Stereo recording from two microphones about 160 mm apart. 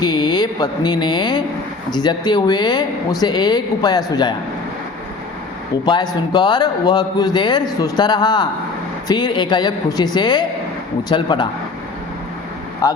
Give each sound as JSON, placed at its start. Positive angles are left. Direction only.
{"t": 0.0, "sound": "a man's voice", "side_deg": 30}
{"t": 5.8, "sound": "a man's voice", "side_deg": 30}
{"t": 12.8, "sound": "speech", "side_deg": 20}